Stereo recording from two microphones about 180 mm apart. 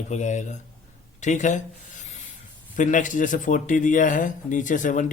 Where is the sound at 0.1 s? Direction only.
40° left (ahead or behind).